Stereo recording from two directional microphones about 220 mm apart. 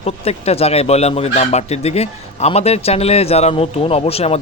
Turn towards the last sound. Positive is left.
turn(degrees=25)  # may be behind; listen again after turning